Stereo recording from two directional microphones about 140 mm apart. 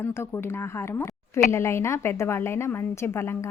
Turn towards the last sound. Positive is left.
turn(degrees=15)  # may be behind; listen again after turning